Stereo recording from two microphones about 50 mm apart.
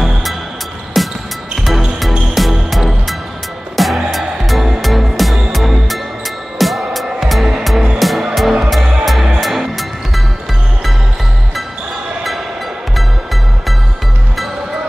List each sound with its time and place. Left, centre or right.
0.0 s music: centre
12.9 s music: centre